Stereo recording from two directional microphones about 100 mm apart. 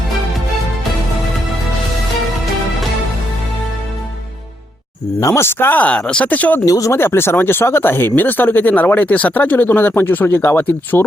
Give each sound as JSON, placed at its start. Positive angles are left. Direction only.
{"t": 5.2, "sound": "speech", "side_deg": 25}
{"t": 6.7, "sound": "speech", "side_deg": 35}